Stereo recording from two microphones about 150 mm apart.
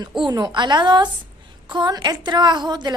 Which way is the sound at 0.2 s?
25° right (ahead or behind).